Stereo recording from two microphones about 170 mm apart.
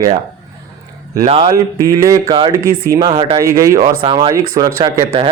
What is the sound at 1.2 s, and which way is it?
Speech, 30° right (ahead or behind).